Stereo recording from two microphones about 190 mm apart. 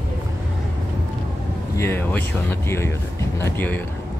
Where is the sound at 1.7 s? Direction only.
15° left (ahead or behind).